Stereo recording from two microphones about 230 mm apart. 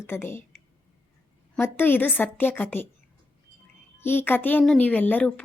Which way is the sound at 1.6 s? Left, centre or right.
Centre.